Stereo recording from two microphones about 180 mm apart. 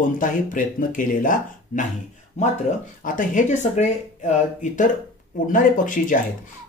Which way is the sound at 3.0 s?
45° left (ahead or behind).